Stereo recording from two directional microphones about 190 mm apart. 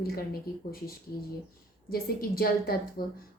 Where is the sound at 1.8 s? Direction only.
50° left (ahead or behind).